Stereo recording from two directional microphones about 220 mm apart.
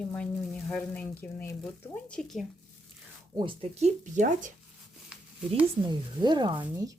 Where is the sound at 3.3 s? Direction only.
20° right (ahead or behind).